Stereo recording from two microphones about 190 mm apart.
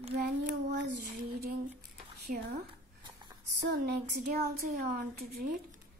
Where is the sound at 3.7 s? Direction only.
60° right (ahead or behind).